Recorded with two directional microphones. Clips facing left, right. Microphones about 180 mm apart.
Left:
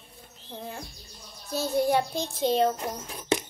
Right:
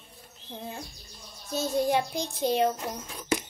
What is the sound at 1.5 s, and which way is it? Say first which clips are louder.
Child singing: left 1 dB; 20° right (ahead or behind).